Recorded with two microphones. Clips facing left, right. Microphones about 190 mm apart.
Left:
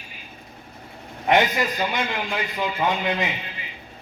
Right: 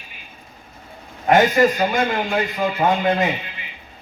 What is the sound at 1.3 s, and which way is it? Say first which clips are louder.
A man's voice: right 6 dB; 50° right (ahead or behind).